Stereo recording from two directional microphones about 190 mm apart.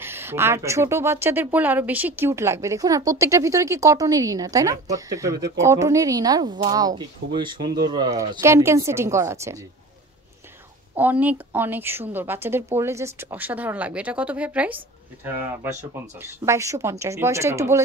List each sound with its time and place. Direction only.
0.0 s speech: 10° right (ahead or behind)
11.0 s speech: 10° right (ahead or behind)
15.8 s speech: 10° right (ahead or behind)